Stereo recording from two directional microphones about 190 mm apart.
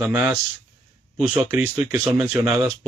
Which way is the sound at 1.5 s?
10° right (ahead or behind).